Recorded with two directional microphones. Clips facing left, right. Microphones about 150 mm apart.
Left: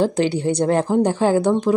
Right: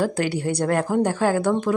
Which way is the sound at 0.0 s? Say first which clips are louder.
Left 4 dB; 25° left (ahead or behind).